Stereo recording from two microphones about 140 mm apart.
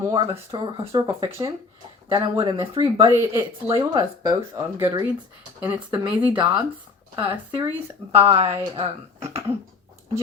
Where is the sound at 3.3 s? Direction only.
20° right (ahead or behind).